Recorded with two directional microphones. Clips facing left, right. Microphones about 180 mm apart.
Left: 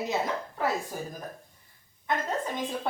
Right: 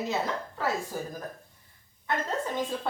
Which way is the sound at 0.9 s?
20° left (ahead or behind).